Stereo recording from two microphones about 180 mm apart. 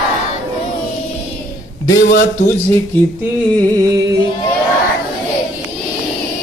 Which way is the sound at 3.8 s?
20° right (ahead or behind).